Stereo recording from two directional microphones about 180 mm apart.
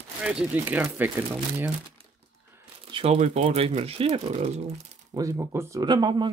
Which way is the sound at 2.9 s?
35° right (ahead or behind).